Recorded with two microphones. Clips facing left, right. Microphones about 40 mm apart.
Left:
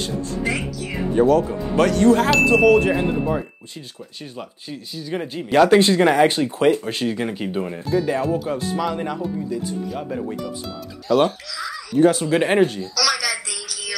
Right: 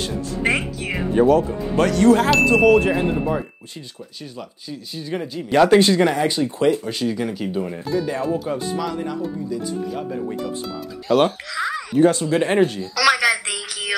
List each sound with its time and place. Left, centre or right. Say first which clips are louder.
0.4 s music: right 6 dB; right
1.1 s speech: right 1 dB; centre
2.1 s speech: even; centre
5.1 s speech: left 1 dB; centre
6.0 s speech: left 3 dB; left
7.9 s speech: left 2 dB; centre
8.7 s speech: left 1 dB; centre
11.1 s speech: even; centre
11.5 s speech: right 3 dB; right
12.0 s speech: even; centre
12.5 s speech: even; centre
12.9 s a sound: right 5 dB; right